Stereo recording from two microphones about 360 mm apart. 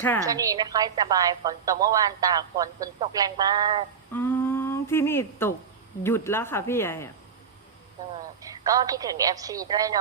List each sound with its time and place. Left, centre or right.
0.3 s a woman's voice: centre
4.1 s humming: centre
6.0 s speech: centre
8.4 s a woman's voice: centre